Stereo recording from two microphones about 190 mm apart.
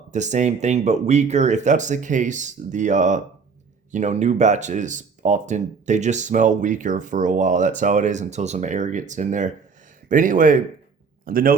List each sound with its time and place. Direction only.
0.1 s speech: 40° right (ahead or behind)